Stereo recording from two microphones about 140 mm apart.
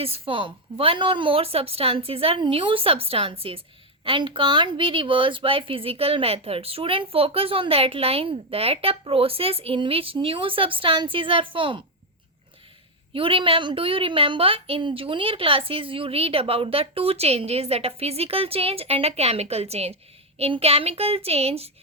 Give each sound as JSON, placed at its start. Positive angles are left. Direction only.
{"t": 0.0, "sound": "a woman's voice", "side_deg": -40}
{"t": 13.1, "sound": "a woman's voice", "side_deg": -40}